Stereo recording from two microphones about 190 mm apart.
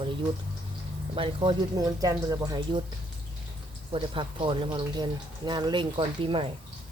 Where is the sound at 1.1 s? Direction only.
25° right (ahead or behind).